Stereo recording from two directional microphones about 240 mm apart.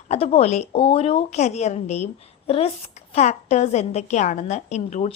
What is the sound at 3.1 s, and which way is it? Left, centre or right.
A woman's voice, left.